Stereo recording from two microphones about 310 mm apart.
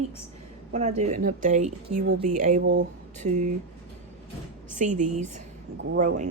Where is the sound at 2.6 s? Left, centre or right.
Right.